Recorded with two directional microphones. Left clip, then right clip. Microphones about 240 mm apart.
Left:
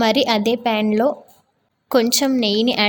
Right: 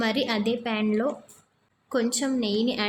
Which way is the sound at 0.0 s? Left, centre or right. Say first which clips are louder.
Left 9 dB; left.